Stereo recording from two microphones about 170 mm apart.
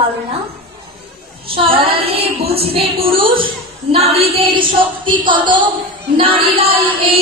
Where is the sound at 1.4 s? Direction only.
30° right (ahead or behind).